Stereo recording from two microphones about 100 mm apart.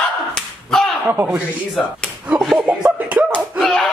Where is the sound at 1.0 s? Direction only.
15° right (ahead or behind).